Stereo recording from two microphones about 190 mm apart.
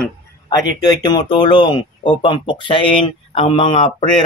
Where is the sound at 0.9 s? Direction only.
20° left (ahead or behind).